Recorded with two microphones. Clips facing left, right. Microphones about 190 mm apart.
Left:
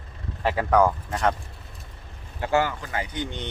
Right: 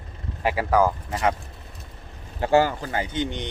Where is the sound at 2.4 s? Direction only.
30° right (ahead or behind).